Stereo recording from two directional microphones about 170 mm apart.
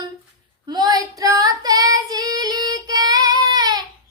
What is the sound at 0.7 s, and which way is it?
Female singing, 25° right (ahead or behind).